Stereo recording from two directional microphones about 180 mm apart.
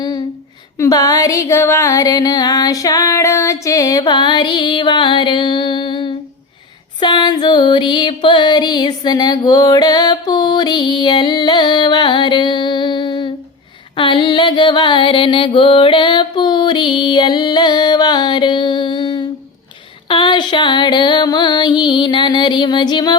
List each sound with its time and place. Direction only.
0.8 s music: 20° left (ahead or behind)
13.9 s a sound: 25° left (ahead or behind)
20.1 s music: 25° left (ahead or behind)